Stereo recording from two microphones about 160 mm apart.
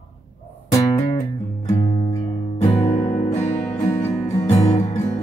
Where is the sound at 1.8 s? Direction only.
35° left (ahead or behind).